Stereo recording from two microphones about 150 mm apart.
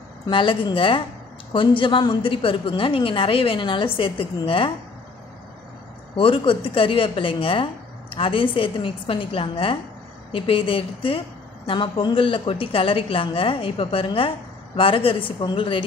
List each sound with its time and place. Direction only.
0.3 s a woman's voice: 35° left (ahead or behind)
6.1 s a woman's voice: 35° left (ahead or behind)